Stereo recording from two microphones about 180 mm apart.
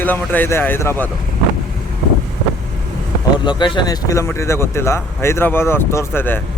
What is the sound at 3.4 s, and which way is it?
Speech, 25° left (ahead or behind).